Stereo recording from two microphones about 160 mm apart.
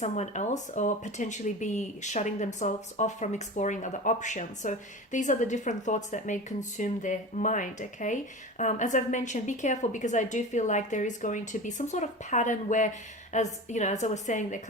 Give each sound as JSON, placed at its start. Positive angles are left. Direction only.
{"t": 0.0, "sound": "speech", "side_deg": 45}